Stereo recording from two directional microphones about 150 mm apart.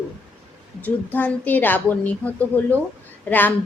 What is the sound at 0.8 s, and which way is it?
A woman's voice, 10° left (ahead or behind).